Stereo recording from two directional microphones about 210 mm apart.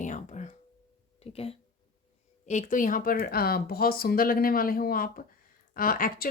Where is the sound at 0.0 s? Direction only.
35° left (ahead or behind).